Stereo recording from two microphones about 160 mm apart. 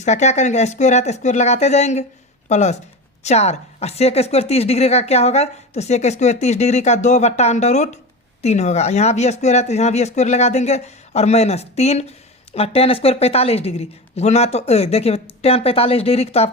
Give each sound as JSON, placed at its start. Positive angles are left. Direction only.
{"t": 0.0, "sound": "a woman's voice", "side_deg": 45}